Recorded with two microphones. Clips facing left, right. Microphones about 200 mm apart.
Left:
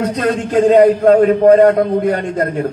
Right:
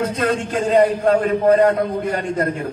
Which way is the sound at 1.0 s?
50° left (ahead or behind).